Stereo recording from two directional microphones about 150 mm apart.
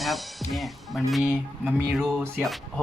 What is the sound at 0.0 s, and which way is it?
Speech, centre (ahead or behind).